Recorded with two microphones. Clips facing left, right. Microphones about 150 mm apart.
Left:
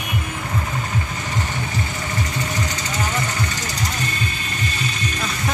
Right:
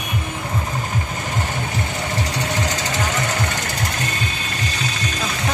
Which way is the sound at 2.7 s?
80° right.